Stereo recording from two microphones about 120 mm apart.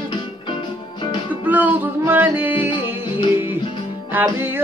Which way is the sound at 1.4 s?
15° right (ahead or behind).